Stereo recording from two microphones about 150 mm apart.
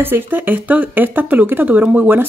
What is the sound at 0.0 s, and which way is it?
Speech, 15° right (ahead or behind).